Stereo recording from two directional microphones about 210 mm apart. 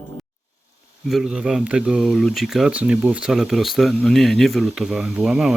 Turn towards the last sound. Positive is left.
turn(degrees=0)  # may be behind; listen again after turning